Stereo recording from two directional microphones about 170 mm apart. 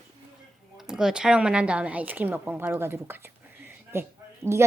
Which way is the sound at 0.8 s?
5° right (ahead or behind).